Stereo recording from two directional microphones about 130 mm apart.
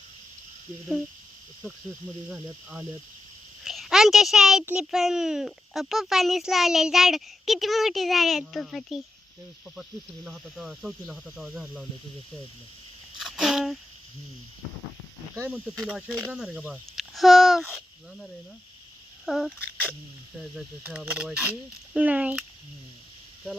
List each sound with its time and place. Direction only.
1.6 s a child's voice: 5° left (ahead or behind)
2.3 s speech: 15° right (ahead or behind)
3.6 s a child's voice: centre (ahead or behind)
10.2 s a child's voice: centre (ahead or behind)
13.1 s a sound: centre (ahead or behind)
15.9 s a child's voice: 5° right (ahead or behind)
20.8 s speech: 10° right (ahead or behind)